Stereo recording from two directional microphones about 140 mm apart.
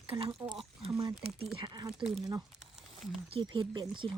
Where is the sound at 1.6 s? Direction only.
35° right (ahead or behind).